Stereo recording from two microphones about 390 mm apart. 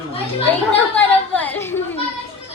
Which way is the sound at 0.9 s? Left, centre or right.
Centre.